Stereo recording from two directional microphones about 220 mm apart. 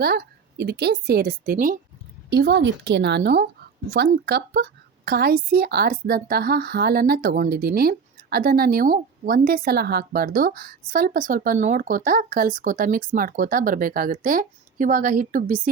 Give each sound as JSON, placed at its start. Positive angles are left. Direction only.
{"t": 0.0, "sound": "a woman's voice", "side_deg": -45}